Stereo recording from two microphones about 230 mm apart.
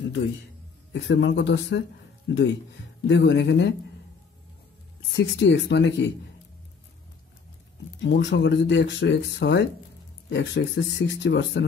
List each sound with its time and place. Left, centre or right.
0.9 s speech: left
5.1 s speech: left
8.0 s speech: left